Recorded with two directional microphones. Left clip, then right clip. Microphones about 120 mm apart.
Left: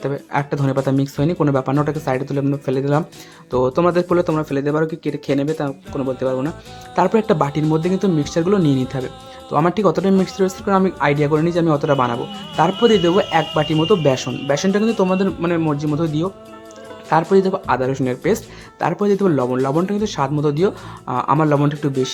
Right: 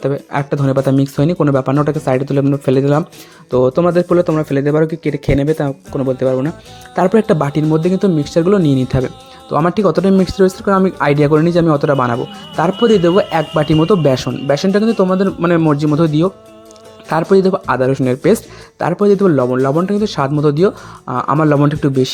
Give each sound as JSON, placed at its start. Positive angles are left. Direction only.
{"t": 0.0, "sound": "speech", "side_deg": -30}
{"t": 3.5, "sound": "speech", "side_deg": -25}
{"t": 4.4, "sound": "speech", "side_deg": -35}
{"t": 9.5, "sound": "speech", "side_deg": -30}
{"t": 11.0, "sound": "speech", "side_deg": -45}
{"t": 13.3, "sound": "speech", "side_deg": -45}
{"t": 15.5, "sound": "speech", "side_deg": -45}
{"t": 17.3, "sound": "speech", "side_deg": -35}
{"t": 21.5, "sound": "speech", "side_deg": -45}